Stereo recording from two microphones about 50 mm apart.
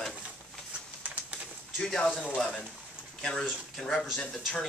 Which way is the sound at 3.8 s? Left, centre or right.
Centre.